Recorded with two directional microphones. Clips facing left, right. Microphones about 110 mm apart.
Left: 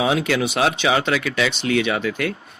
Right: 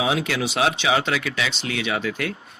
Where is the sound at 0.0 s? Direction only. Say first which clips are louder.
Left 3 dB; 55° left (ahead or behind).